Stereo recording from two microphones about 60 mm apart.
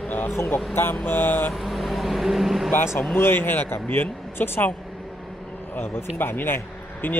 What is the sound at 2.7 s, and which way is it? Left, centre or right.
Speech, left.